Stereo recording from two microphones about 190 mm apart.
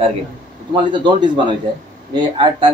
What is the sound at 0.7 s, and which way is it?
A man's voice, 25° right (ahead or behind).